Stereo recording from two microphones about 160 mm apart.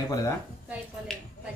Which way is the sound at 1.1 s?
5° left (ahead or behind).